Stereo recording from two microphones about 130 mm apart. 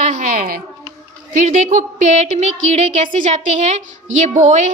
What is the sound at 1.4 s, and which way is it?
A woman's voice, 70° right (ahead or behind).